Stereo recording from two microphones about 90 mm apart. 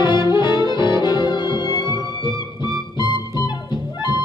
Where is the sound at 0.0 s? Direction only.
55° left (ahead or behind).